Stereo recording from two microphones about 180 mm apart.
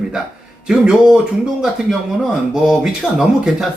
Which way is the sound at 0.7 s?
5° right (ahead or behind).